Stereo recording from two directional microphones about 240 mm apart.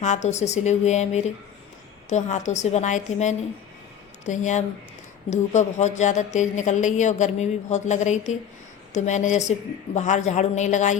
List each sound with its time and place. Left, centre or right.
0.0 s a woman's voice: left